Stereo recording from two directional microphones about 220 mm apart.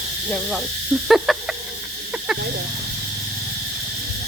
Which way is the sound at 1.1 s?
Centre (ahead or behind).